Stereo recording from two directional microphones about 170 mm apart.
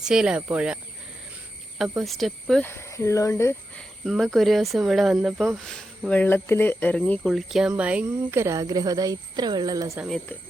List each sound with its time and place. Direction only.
0.0 s speech: 5° right (ahead or behind)
2.0 s speech: centre (ahead or behind); by 3.5 s 15° left (ahead or behind)
3.8 s speech: centre (ahead or behind)
7.0 s speech: centre (ahead or behind); by 10.0 s 20° right (ahead or behind)